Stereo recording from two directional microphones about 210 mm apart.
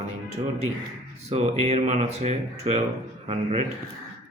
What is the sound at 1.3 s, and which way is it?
A man's voice, 30° right (ahead or behind).